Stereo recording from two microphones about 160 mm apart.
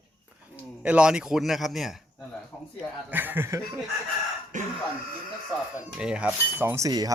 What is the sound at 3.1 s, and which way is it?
Speech, 10° right (ahead or behind).